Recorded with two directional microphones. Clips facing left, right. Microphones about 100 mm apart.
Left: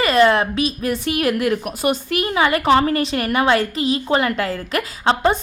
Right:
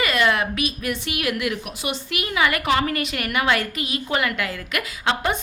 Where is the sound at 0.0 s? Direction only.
35° left (ahead or behind).